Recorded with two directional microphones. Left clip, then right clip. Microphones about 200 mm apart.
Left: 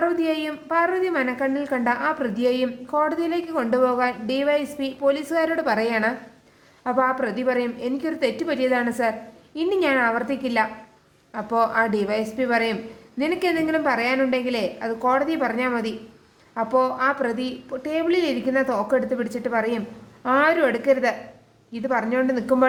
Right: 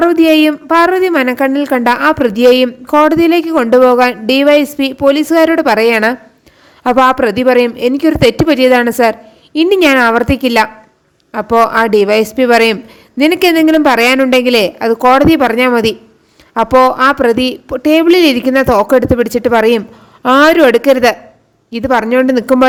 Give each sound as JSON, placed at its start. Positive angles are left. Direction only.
{"t": 0.0, "sound": "a woman's voice", "side_deg": -45}